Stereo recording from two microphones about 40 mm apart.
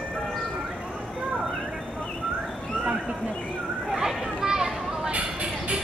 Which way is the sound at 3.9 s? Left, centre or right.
Centre.